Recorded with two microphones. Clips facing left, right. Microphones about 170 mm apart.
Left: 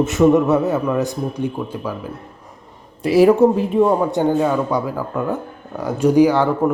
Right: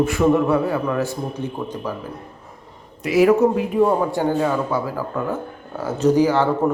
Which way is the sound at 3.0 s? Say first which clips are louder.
Left 3 dB; 30° left (ahead or behind).